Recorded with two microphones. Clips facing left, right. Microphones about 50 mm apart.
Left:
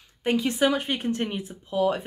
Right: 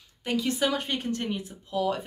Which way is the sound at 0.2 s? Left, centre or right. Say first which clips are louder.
Left 4 dB; left.